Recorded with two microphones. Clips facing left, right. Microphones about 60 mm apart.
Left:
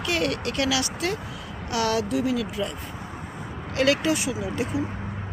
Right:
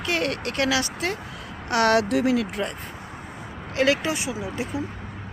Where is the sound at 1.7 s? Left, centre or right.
Right.